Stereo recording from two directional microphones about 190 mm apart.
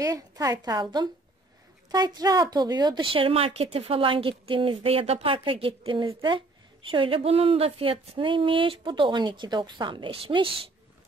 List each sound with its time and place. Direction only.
0.0 s a woman's voice: 20° right (ahead or behind)